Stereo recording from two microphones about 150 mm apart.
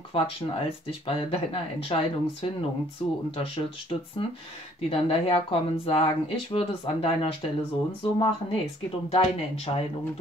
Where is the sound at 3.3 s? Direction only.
35° left (ahead or behind).